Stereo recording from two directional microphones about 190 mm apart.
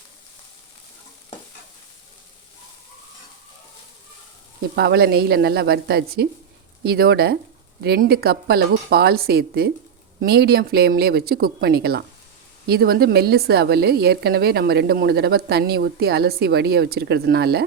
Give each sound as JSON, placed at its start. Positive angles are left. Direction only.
{"t": 4.7, "sound": "a woman's voice", "side_deg": -60}